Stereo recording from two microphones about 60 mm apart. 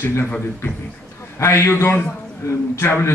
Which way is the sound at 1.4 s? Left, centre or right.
Left.